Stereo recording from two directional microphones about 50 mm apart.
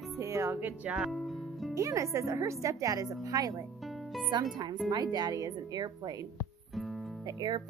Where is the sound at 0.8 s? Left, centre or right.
Centre.